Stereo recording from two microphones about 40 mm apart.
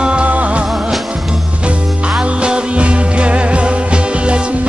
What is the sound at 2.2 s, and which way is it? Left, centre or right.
Music, right.